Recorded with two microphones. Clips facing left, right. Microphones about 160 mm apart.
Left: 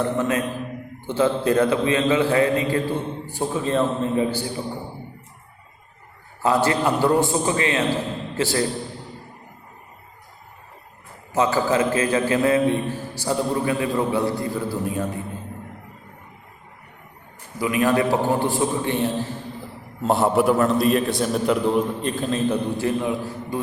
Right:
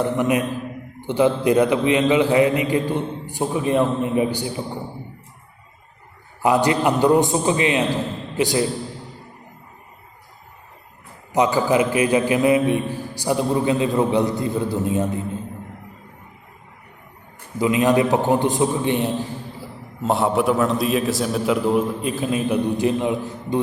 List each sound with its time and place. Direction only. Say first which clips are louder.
0.2 s a man's voice: right 3 dB; 15° right (ahead or behind)
6.4 s a man's voice: right 2 dB; 15° right (ahead or behind)
11.3 s a man's voice: right 2 dB; 15° right (ahead or behind)
17.6 s a man's voice: right 3 dB; 20° right (ahead or behind)
20.0 s a man's voice: left 1 dB; centre (ahead or behind); by 23.6 s 20° right (ahead or behind)